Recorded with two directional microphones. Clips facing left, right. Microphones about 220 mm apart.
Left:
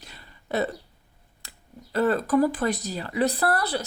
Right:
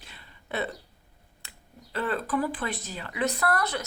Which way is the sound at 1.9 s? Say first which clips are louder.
Left 7 dB; 40° left (ahead or behind).